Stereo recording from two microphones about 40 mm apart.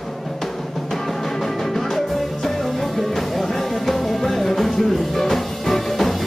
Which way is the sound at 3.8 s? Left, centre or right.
Centre.